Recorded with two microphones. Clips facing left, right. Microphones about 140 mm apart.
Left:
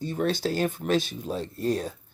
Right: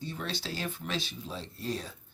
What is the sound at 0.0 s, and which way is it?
Speech, 50° left (ahead or behind).